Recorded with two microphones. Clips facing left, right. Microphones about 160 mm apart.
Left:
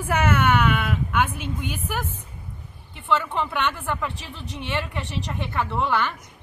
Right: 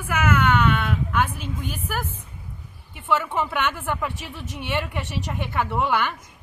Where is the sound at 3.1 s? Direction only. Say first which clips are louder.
Even; 10° right (ahead or behind).